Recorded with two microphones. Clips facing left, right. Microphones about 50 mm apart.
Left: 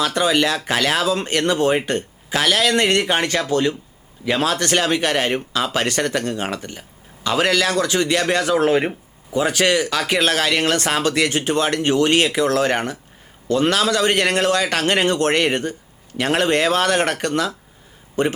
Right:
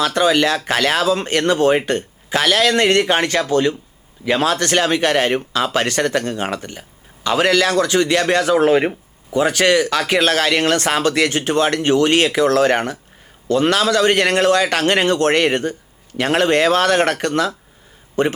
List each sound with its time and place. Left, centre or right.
0.0 s a man's voice: right
8.4 s speech: centre
9.3 s a man's voice: right